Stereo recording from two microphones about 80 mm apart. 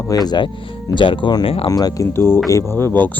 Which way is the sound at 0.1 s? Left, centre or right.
Left.